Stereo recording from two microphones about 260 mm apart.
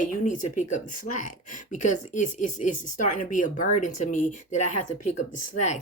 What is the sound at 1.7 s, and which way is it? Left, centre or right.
Speech, left.